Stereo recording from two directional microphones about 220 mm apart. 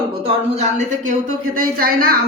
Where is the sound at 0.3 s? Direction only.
30° right (ahead or behind).